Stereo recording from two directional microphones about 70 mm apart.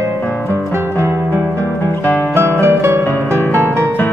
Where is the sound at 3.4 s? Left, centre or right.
Left.